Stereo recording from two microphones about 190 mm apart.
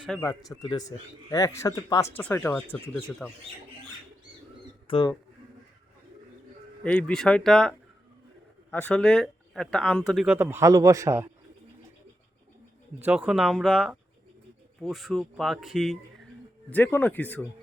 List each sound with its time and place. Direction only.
0.2 s speech: 15° left (ahead or behind)
4.9 s speech: 20° left (ahead or behind)
6.8 s speech: 5° left (ahead or behind)
8.7 s speech: 5° left (ahead or behind); by 11.3 s 15° right (ahead or behind)
13.0 s a man's voice: 5° right (ahead or behind)